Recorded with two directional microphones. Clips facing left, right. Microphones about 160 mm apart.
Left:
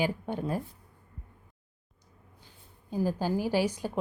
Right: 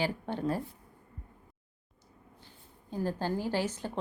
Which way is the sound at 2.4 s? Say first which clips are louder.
Right 1 dB; 10° left (ahead or behind).